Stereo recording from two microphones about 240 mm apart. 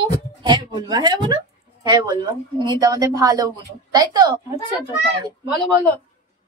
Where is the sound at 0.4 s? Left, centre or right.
Centre.